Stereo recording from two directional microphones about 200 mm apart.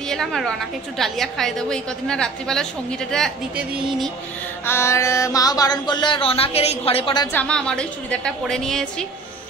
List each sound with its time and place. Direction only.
0.1 s a woman's voice: centre (ahead or behind)
4.6 s a sound: 15° left (ahead or behind)
7.3 s a woman's voice: 5° left (ahead or behind)